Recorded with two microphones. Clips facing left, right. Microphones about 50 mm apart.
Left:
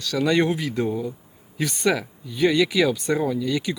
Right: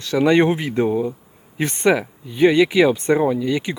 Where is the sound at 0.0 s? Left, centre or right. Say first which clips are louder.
Right 5 dB; right.